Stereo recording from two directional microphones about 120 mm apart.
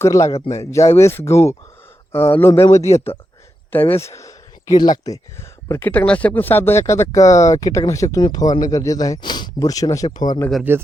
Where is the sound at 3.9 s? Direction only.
25° left (ahead or behind).